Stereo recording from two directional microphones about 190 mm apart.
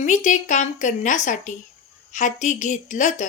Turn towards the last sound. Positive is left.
turn(degrees=40)  # may be behind; listen again after turning